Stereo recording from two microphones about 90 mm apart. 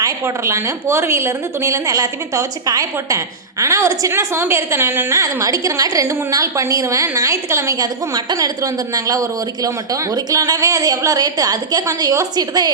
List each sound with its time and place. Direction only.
0.0 s a woman's voice: 35° right (ahead or behind)
5.1 s a woman's voice: 40° right (ahead or behind)